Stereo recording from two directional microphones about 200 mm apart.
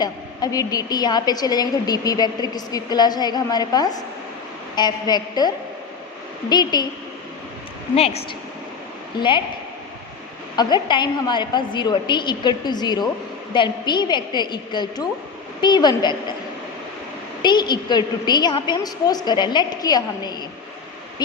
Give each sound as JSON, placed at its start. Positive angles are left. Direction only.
{"t": 0.0, "sound": "a woman's voice", "side_deg": 20}
{"t": 6.5, "sound": "a woman's voice", "side_deg": 20}
{"t": 7.9, "sound": "a woman's voice", "side_deg": 30}
{"t": 10.6, "sound": "a woman's voice", "side_deg": 20}
{"t": 17.4, "sound": "a woman's voice", "side_deg": 20}